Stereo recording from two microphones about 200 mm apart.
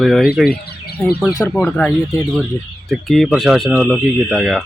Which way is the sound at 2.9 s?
Centre (ahead or behind).